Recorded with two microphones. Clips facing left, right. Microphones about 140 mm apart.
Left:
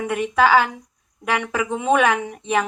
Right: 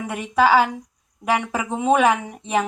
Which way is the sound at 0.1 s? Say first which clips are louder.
Even; 35° right (ahead or behind).